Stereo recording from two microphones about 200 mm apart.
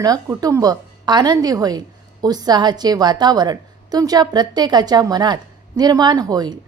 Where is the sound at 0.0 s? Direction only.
20° right (ahead or behind).